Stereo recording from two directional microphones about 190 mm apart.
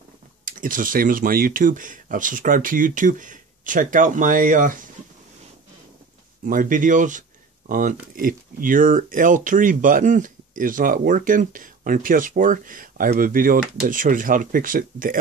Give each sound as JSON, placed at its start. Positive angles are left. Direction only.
{"t": 0.5, "sound": "speech", "side_deg": -45}
{"t": 6.4, "sound": "speech", "side_deg": -45}